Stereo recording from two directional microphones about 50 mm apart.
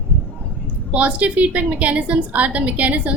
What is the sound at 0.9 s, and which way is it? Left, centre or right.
A woman's voice, right.